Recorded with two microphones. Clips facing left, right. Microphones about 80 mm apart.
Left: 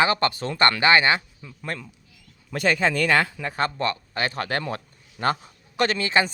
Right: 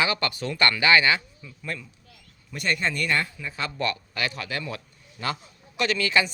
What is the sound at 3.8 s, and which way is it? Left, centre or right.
A man's voice, left.